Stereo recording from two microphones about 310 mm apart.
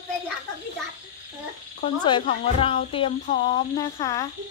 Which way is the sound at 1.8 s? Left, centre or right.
Centre.